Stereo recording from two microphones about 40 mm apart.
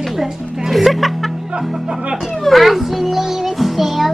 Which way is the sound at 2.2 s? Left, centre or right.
Centre.